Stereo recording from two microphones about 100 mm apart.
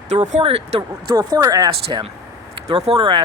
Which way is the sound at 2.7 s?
90° right.